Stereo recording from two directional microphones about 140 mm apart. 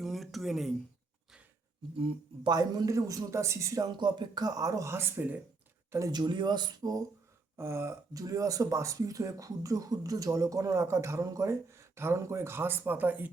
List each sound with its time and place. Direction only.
0.0 s a sound: centre (ahead or behind)
2.0 s speech: 40° right (ahead or behind); by 5.4 s 15° right (ahead or behind)
6.1 s speech: 30° right (ahead or behind)
7.5 s speech: 20° right (ahead or behind)